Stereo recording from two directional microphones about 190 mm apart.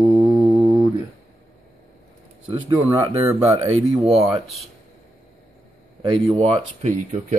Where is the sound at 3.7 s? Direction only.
35° right (ahead or behind).